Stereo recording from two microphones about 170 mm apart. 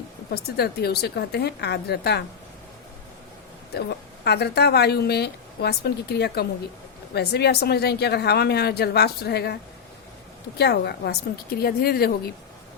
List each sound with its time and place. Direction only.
0.3 s a woman's voice: 65° left (ahead or behind)
3.8 s a woman's voice: 70° left (ahead or behind)
10.6 s a woman's voice: 75° left (ahead or behind)